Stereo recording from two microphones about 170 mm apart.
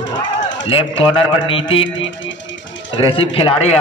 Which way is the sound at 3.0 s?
35° left (ahead or behind).